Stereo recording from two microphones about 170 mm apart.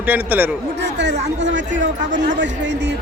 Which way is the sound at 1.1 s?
45° right (ahead or behind).